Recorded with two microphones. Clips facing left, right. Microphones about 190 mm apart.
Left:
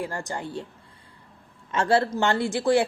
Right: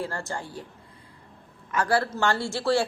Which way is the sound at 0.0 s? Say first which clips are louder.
Left 1 dB; 15° left (ahead or behind).